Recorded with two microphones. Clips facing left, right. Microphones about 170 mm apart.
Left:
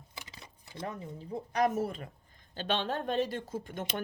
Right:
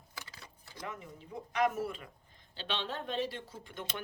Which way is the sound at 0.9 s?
35° left (ahead or behind).